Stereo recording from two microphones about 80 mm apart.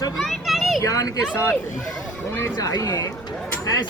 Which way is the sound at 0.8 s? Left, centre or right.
Left.